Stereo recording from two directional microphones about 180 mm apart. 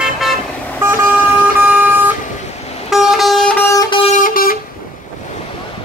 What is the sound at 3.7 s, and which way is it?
Guitar, 25° left (ahead or behind).